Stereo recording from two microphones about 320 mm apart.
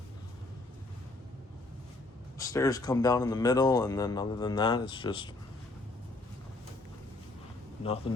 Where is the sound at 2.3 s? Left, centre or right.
Centre.